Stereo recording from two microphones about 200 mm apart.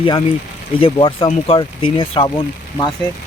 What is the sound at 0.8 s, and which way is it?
Speech, 25° left (ahead or behind).